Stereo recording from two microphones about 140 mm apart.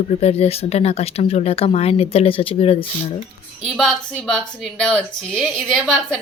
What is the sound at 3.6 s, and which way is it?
A woman's voice, 5° left (ahead or behind).